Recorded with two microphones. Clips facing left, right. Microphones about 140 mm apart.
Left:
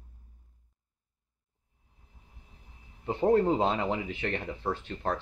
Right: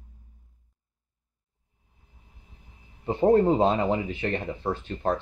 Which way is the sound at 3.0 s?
10° right (ahead or behind).